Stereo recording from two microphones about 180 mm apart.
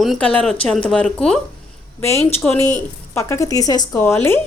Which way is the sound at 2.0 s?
15° left (ahead or behind).